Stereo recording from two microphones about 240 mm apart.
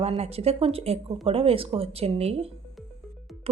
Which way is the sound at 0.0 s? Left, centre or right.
Right.